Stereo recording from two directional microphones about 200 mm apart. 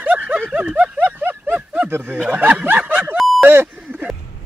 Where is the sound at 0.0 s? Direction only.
10° right (ahead or behind).